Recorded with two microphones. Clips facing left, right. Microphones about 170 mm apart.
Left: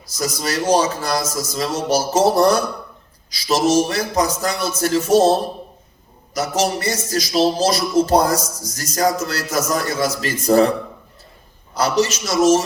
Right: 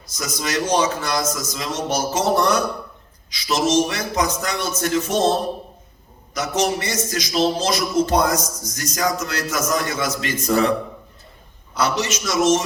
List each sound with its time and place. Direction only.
0.2 s speech: 35° left (ahead or behind)
11.8 s speech: 35° left (ahead or behind)